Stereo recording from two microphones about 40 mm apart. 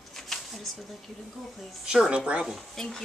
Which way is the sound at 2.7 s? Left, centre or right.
Centre.